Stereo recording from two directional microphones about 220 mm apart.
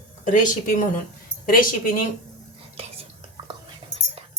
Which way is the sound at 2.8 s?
25° right (ahead or behind).